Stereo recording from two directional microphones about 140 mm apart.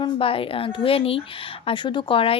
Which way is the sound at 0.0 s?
40° left (ahead or behind).